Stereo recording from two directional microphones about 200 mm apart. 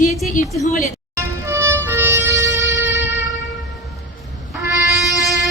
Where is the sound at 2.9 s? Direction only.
65° left (ahead or behind).